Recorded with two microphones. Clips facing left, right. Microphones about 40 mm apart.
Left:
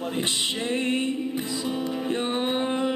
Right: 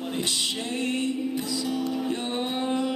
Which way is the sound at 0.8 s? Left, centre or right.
Left.